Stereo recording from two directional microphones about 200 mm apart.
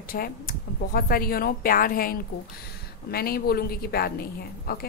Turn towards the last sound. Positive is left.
turn(degrees=50)  # may be behind; listen again after turning